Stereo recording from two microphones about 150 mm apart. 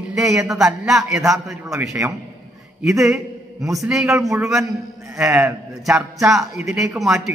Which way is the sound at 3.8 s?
5° right (ahead or behind).